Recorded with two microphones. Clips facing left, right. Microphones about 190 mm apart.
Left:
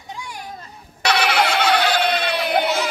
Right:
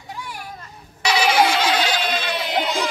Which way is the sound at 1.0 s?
65° left (ahead or behind).